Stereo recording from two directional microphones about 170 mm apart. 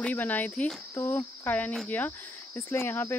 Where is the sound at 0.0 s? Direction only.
10° left (ahead or behind).